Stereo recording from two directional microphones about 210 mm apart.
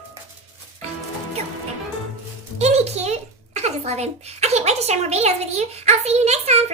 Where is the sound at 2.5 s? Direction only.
30° right (ahead or behind).